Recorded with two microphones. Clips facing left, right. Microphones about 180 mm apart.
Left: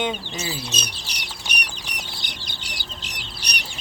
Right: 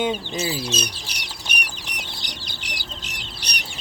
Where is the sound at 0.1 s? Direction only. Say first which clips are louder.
Right 4 dB; 30° right (ahead or behind).